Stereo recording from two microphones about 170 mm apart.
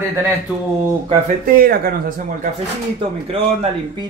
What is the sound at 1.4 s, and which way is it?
Speech, 60° right (ahead or behind).